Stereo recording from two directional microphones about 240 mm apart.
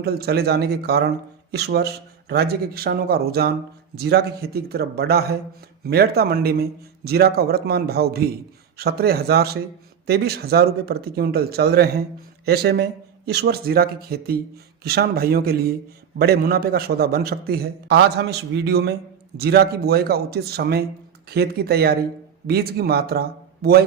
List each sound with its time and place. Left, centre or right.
0.0 s speech: right